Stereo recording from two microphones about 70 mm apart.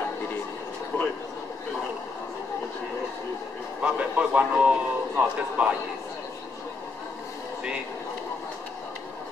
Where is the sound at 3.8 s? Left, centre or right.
Centre.